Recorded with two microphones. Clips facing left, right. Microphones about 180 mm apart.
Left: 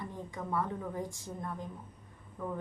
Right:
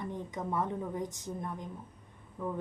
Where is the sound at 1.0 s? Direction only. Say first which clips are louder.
Right 3 dB; 20° right (ahead or behind).